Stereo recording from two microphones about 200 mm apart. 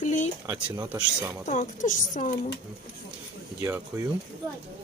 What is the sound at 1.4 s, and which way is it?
Speech, 40° left (ahead or behind).